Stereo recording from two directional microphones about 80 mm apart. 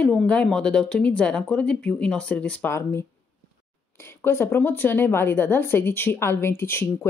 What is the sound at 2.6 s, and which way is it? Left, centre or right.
A woman's voice, left.